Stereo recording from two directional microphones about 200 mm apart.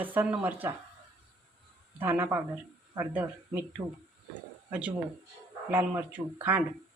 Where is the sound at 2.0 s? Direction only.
10° right (ahead or behind).